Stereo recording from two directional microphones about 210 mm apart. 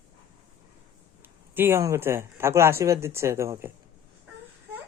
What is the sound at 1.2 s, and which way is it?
Speech, 10° right (ahead or behind).